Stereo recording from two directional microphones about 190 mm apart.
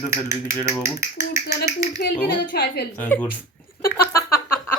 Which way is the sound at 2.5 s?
55° left (ahead or behind).